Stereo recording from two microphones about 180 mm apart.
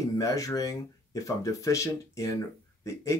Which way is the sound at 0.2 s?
20° left (ahead or behind).